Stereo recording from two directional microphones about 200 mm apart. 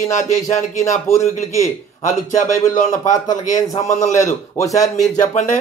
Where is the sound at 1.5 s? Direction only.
15° left (ahead or behind).